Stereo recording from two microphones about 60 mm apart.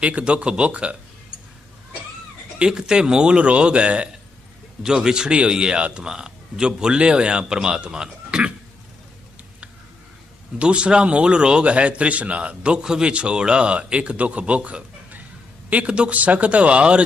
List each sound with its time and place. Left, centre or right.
0.0 s a man's voice: centre
2.6 s speech: centre
10.6 s a man's voice: centre